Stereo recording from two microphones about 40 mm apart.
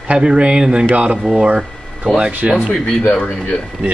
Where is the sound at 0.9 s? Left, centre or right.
Right.